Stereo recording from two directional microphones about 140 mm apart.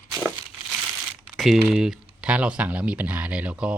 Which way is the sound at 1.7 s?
5° right (ahead or behind).